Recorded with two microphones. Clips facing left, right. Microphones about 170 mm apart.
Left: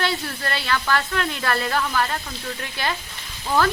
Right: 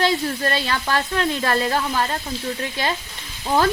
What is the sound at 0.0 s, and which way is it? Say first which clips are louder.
Speech: right 5 dB; 20° right (ahead or behind).